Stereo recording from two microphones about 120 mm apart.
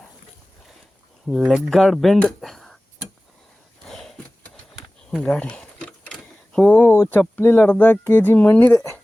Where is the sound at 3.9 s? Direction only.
5° left (ahead or behind).